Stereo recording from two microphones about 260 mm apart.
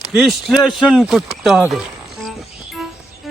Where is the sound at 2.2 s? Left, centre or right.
Centre.